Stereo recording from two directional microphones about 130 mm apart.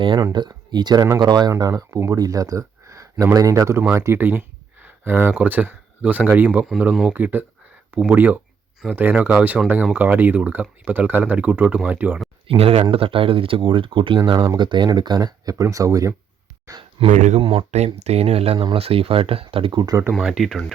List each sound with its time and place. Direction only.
0.2 s speech: 30° right (ahead or behind); by 12.2 s 15° right (ahead or behind)
12.5 s speech: 45° right (ahead or behind); by 16.8 s 25° right (ahead or behind)
17.1 s speech: 60° right (ahead or behind)
17.4 s speech: 45° right (ahead or behind)
18.5 s speech: 35° right (ahead or behind)
18.8 s speech: 50° right (ahead or behind)
20.1 s speech: centre (ahead or behind)